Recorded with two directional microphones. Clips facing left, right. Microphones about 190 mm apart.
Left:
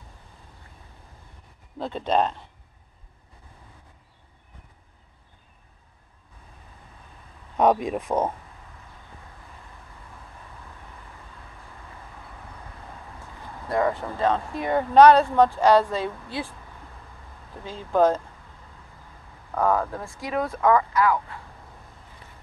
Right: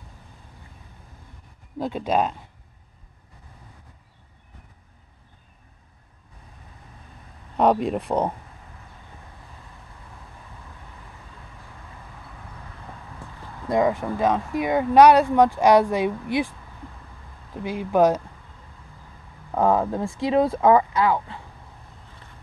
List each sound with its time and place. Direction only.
1.8 s speech: 10° right (ahead or behind)
7.5 s speech: 10° left (ahead or behind)
13.7 s speech: 15° right (ahead or behind)
17.6 s speech: 15° right (ahead or behind)
19.5 s speech: 20° right (ahead or behind)